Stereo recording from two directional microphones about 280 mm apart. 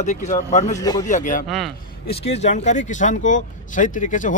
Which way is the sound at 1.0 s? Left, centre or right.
Left.